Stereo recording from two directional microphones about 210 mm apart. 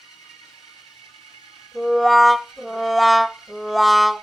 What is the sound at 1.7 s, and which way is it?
Music, centre (ahead or behind).